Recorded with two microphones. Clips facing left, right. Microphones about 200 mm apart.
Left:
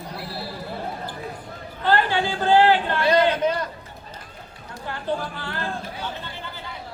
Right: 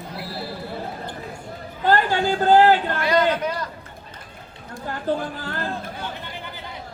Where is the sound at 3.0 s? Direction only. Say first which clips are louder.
Left 3 dB; 30° left (ahead or behind).